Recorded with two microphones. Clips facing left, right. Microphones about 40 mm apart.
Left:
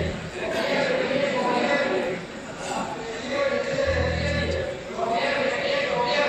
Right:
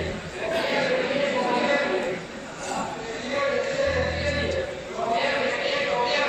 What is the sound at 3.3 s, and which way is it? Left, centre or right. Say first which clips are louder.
Music: even; centre.